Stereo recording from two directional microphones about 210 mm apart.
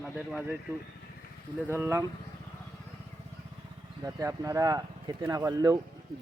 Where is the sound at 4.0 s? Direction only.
15° right (ahead or behind).